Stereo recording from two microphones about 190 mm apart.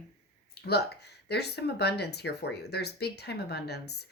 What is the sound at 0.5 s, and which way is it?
Speech, 55° left (ahead or behind).